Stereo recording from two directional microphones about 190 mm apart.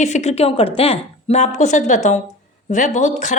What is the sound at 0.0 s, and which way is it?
A woman's voice, 35° left (ahead or behind).